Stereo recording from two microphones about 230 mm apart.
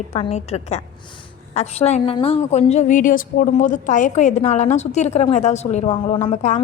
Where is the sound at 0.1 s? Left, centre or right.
Left.